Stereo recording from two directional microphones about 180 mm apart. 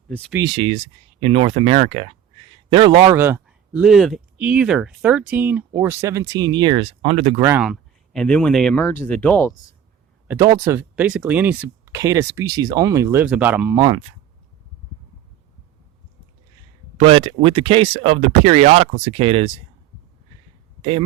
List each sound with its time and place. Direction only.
0.3 s a man's voice: 25° right (ahead or behind)
3.2 s speech: 10° right (ahead or behind); by 7.4 s 30° right (ahead or behind)
7.6 s speech: centre (ahead or behind)
10.6 s speech: 15° right (ahead or behind)
17.0 s speech: 30° right (ahead or behind)